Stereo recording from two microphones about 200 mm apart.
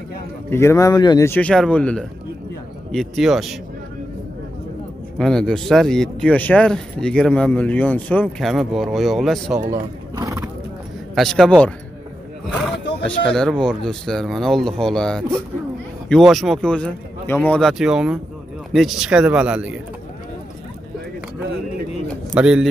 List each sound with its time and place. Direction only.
0.5 s speech: 15° left (ahead or behind)
5.2 s speech: 5° left (ahead or behind)
9.7 s vehicle: 15° right (ahead or behind)
11.1 s speech: centre (ahead or behind)
13.0 s speech: 5° left (ahead or behind)
22.3 s speech: 5° right (ahead or behind)